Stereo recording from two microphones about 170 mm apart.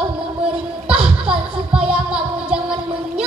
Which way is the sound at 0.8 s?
35° right (ahead or behind).